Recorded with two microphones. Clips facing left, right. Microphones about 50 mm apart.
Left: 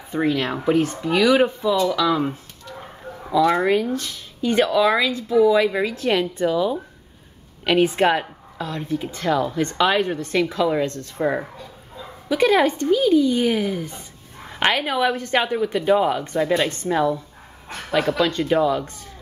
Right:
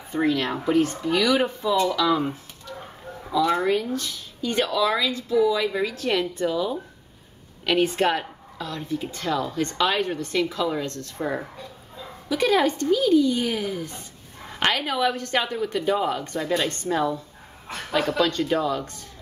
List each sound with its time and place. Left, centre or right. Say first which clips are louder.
0.3 s speech: left 2 dB; centre
0.7 s a woman's voice: left 2 dB; left
1.9 s speech: left 2 dB; centre
3.4 s a woman's voice: left 3 dB; left